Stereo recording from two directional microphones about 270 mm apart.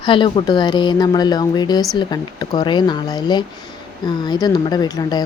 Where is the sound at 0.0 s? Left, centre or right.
Centre.